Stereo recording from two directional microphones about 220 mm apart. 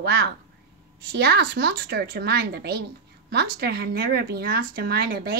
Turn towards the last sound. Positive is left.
turn(degrees=-45)  # may be behind; listen again after turning